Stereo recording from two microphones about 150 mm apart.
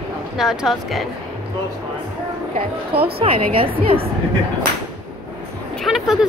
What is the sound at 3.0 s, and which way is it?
Speech, 35° right (ahead or behind).